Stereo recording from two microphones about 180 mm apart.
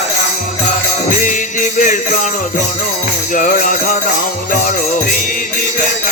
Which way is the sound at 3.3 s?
45° left (ahead or behind).